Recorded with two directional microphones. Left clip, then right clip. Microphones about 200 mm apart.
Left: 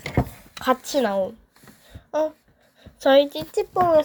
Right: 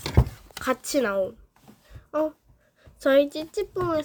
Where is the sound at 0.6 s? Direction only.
15° right (ahead or behind).